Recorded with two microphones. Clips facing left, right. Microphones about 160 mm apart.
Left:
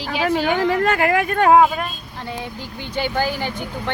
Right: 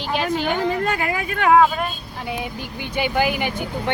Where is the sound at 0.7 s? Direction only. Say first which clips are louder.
Left 5 dB; 75° left (ahead or behind).